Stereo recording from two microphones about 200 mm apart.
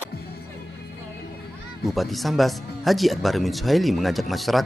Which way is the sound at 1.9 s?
Centre (ahead or behind).